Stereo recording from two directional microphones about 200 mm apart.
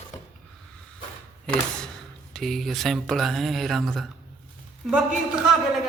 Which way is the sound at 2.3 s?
Centre (ahead or behind).